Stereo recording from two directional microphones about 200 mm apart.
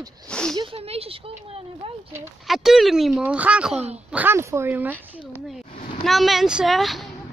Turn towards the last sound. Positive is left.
turn(degrees=0)  # may be behind; listen again after turning